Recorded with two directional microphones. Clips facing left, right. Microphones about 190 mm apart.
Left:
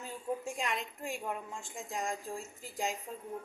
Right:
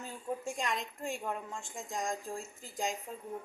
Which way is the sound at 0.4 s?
5° left (ahead or behind).